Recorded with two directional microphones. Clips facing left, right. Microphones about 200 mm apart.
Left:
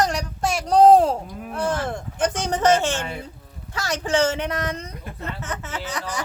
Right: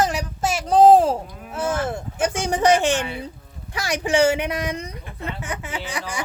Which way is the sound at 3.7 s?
15° right (ahead or behind).